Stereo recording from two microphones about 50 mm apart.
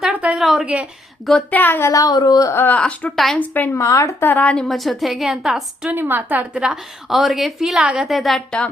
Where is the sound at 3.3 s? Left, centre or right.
Left.